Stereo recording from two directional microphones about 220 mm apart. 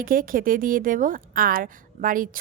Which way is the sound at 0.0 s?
40° right (ahead or behind).